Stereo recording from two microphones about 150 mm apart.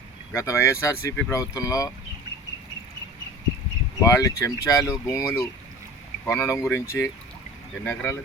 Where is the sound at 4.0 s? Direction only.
20° left (ahead or behind).